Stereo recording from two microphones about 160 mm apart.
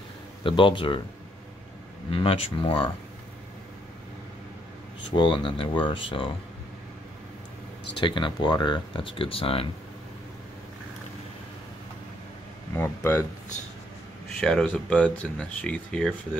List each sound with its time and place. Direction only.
0.4 s speech: 35° left (ahead or behind)
2.0 s speech: 35° left (ahead or behind)
5.1 s speech: 30° left (ahead or behind)
8.0 s speech: 30° left (ahead or behind)
12.7 s speech: 15° left (ahead or behind)
14.3 s speech: 5° left (ahead or behind)